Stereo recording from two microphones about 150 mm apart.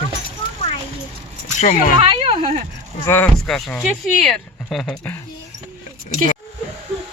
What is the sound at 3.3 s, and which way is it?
Speech, centre (ahead or behind).